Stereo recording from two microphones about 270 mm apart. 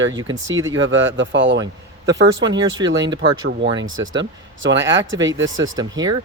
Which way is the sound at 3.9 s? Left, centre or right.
Right.